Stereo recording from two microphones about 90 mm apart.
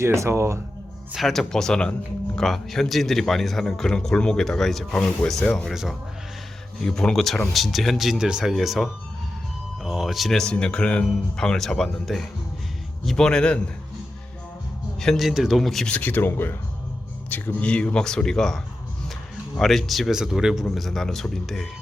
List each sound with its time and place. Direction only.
0.0 s speech: 30° right (ahead or behind)
1.1 s speech: centre (ahead or behind)
14.9 s speech: 5° left (ahead or behind)
15.9 s speech: 20° left (ahead or behind); by 21.7 s 5° left (ahead or behind)